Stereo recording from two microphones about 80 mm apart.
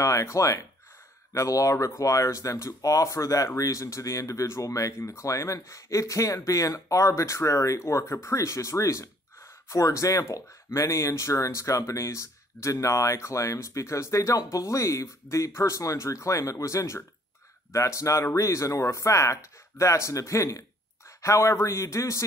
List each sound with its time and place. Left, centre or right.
0.0 s speech: left